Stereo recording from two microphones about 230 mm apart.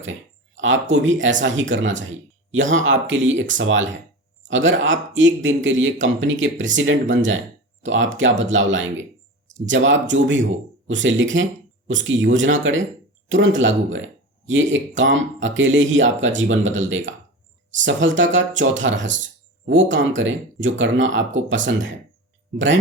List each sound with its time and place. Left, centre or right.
0.5 s speech: right
17.8 s speech: right